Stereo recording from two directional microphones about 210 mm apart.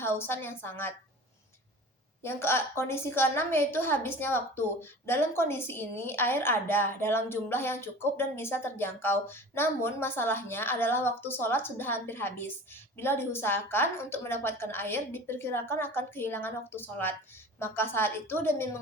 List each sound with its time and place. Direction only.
0.0 s a woman's voice: 10° left (ahead or behind)
2.2 s a woman's voice: 10° left (ahead or behind)